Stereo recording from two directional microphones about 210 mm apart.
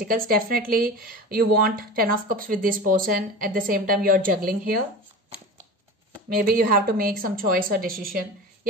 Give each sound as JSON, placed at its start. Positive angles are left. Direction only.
{"t": 0.0, "sound": "speech", "side_deg": -45}
{"t": 6.2, "sound": "speech", "side_deg": -45}